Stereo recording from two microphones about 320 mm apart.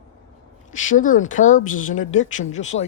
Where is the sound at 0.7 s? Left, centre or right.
Left.